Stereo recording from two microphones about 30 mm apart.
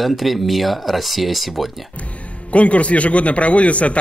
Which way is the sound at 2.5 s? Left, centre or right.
Left.